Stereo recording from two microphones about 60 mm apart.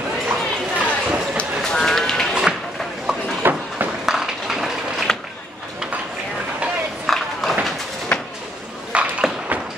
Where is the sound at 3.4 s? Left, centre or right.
Right.